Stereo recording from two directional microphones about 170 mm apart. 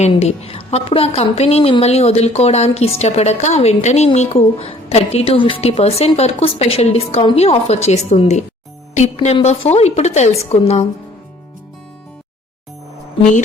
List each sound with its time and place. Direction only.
0.0 s a woman's voice: 40° left (ahead or behind)